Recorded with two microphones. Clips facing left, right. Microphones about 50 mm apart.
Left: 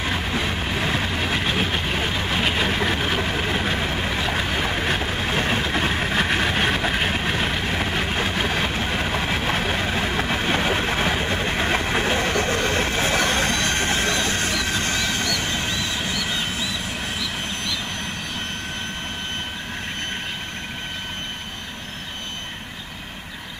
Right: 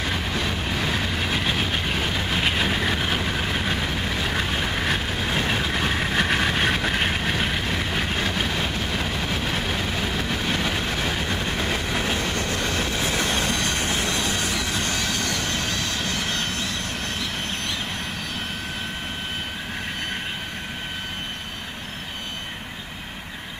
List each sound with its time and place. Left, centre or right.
0.0 s train: centre
2.9 s vehicle: centre
7.2 s vehicle: centre